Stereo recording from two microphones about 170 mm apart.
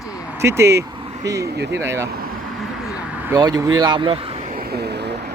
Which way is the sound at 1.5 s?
85° right.